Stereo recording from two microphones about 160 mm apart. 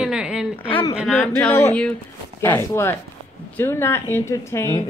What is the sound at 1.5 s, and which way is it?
A man's voice, 15° left (ahead or behind).